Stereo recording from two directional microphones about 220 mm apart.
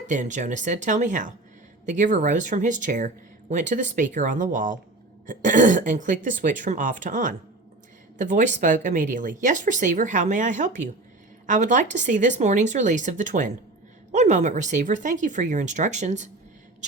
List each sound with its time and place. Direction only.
0.1 s speech: 35° right (ahead or behind)